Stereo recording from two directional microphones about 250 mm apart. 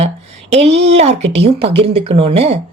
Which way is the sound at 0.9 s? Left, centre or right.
Right.